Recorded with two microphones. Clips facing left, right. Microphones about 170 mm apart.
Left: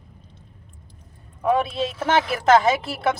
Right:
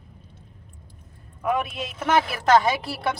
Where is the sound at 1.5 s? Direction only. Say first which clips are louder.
Left 5 dB; 30° left (ahead or behind).